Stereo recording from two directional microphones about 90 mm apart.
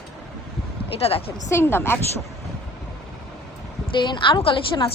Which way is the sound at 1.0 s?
90° left.